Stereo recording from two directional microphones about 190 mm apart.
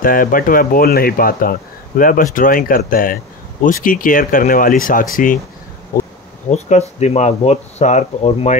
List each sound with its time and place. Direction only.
0.0 s speech: 45° left (ahead or behind)
6.5 s speech: 35° left (ahead or behind)